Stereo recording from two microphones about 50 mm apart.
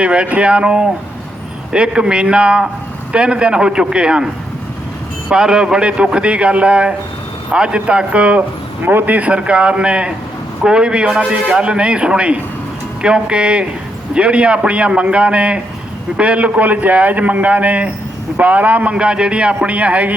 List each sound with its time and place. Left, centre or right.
0.0 s a man's voice: right
5.3 s a man's voice: centre
8.8 s a man's voice: right
9.1 s a man's voice: right
18.9 s a man's voice: centre